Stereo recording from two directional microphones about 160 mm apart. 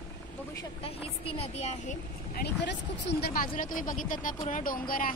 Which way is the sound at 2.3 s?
90° left.